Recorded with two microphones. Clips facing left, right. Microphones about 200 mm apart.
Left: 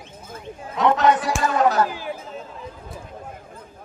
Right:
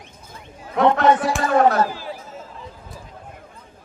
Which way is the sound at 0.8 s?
55° right (ahead or behind).